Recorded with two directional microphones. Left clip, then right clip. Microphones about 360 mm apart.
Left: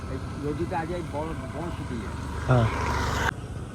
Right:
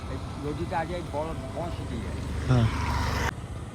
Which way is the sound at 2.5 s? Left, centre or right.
Centre.